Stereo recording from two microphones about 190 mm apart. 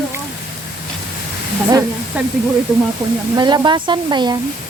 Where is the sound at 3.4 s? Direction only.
25° right (ahead or behind).